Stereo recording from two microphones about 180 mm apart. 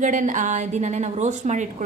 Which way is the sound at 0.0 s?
45° right (ahead or behind).